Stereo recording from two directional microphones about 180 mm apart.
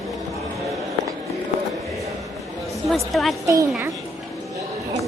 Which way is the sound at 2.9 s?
Centre (ahead or behind).